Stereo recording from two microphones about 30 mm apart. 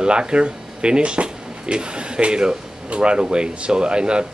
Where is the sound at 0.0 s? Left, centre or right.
Right.